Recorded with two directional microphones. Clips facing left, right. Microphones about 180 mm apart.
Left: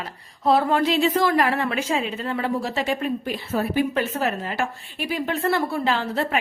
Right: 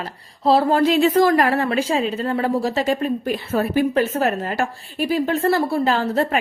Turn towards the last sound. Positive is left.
turn(degrees=-40)  # may be behind; listen again after turning